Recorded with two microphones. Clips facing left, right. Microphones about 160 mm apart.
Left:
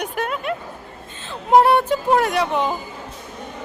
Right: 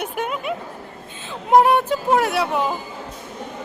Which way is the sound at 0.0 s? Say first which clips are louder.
Left 1 dB; 5° right (ahead or behind).